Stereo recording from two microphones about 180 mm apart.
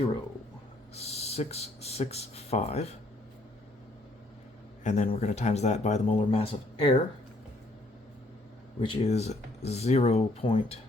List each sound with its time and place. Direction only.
0.9 s speech: 35° left (ahead or behind)
4.8 s speech: 40° left (ahead or behind)
8.8 s speech: 30° left (ahead or behind)